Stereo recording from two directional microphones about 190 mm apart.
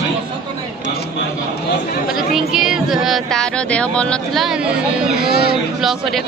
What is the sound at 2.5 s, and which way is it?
Speech, 5° right (ahead or behind).